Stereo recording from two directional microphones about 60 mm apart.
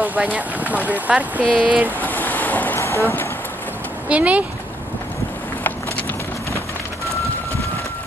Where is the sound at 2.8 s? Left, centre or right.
Left.